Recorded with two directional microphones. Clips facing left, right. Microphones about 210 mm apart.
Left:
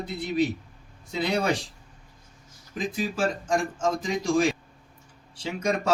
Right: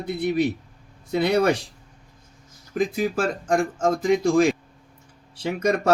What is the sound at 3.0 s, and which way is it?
Speech, 60° right (ahead or behind).